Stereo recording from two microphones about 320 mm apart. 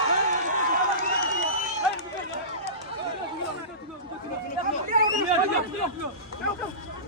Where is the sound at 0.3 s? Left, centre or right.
Right.